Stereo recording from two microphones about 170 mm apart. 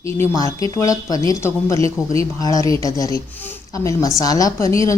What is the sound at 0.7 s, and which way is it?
A woman's voice, 20° left (ahead or behind).